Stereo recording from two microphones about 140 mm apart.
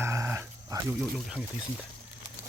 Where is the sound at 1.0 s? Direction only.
5° right (ahead or behind).